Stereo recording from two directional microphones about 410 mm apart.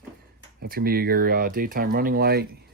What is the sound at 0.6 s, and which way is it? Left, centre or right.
Speech, right.